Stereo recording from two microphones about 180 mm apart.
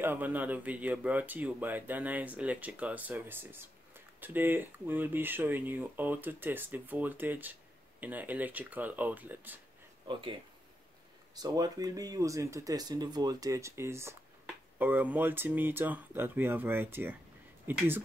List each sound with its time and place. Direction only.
0.0 s speech: 10° right (ahead or behind)
11.3 s speech: 20° right (ahead or behind)